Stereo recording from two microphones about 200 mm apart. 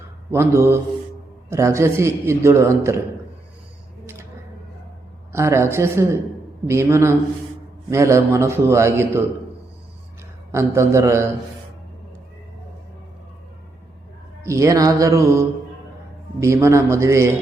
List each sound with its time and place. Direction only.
0.3 s a man's voice: 15° right (ahead or behind)
4.0 s a sound: 10° right (ahead or behind)
5.3 s a man's voice: 15° right (ahead or behind)
10.5 s a man's voice: 15° right (ahead or behind)
14.4 s a man's voice: 15° right (ahead or behind)